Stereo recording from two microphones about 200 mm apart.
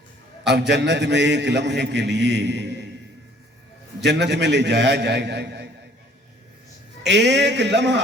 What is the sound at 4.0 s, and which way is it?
A man's voice, 60° right (ahead or behind).